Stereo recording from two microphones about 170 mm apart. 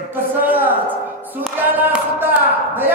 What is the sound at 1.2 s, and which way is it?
Music, 10° right (ahead or behind).